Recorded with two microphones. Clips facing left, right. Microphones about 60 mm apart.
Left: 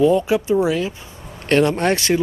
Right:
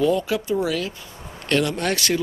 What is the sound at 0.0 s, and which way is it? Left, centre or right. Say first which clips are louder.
Speech: left 5 dB; left.